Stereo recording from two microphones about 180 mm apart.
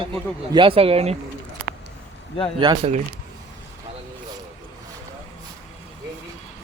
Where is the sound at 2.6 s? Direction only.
25° right (ahead or behind).